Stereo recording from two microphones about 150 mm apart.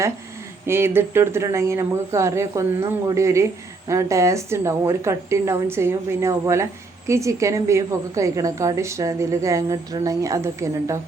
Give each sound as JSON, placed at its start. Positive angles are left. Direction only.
{"t": 0.6, "sound": "a woman's voice", "side_deg": -15}